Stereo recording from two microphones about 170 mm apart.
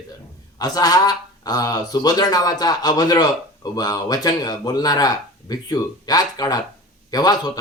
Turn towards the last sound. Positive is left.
turn(degrees=25)  # may be behind; listen again after turning